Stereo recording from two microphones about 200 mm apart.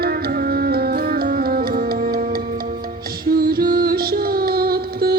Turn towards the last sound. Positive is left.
turn(degrees=-50)  # may be behind; listen again after turning